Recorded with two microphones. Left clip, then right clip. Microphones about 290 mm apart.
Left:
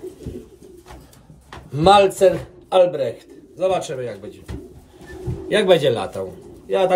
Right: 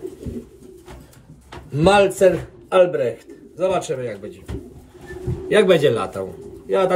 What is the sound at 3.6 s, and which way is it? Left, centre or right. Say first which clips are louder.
Speech: even; centre.